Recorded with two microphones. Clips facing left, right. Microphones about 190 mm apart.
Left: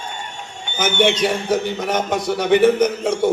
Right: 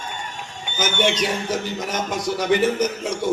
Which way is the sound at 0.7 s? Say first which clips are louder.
Left 4 dB; 60° left (ahead or behind).